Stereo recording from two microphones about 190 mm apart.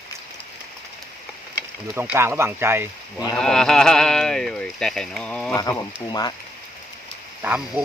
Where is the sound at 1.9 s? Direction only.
10° right (ahead or behind).